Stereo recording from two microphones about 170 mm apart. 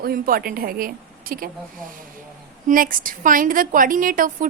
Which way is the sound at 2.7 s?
55° right (ahead or behind).